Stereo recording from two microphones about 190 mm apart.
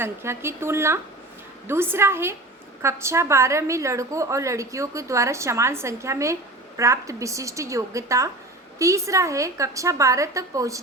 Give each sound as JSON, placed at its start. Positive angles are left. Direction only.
{"t": 0.0, "sound": "a woman's voice", "side_deg": -15}